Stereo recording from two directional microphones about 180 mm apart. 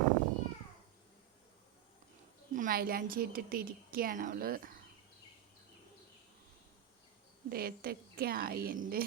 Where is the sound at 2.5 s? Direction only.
50° right (ahead or behind).